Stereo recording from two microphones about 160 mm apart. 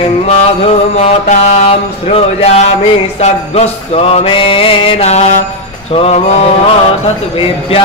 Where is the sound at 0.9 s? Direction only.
40° left (ahead or behind).